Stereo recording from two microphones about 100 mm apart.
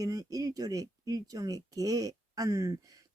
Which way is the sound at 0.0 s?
40° right (ahead or behind).